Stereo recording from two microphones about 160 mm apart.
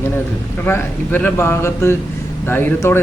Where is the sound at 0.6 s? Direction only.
10° left (ahead or behind).